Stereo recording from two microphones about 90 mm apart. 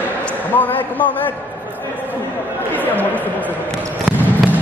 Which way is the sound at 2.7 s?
20° left (ahead or behind).